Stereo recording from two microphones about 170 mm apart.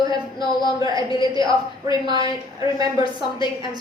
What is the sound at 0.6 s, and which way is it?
A woman's voice, 25° right (ahead or behind).